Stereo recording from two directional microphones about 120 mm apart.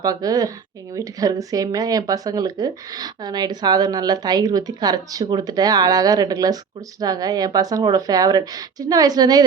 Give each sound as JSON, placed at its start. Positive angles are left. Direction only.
{"t": 0.0, "sound": "speech", "side_deg": -30}